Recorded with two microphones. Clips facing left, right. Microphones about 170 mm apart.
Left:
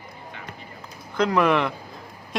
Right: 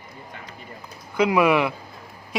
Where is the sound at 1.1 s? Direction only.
10° right (ahead or behind).